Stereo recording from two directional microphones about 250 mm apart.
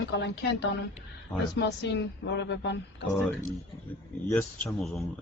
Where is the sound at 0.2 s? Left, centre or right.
Left.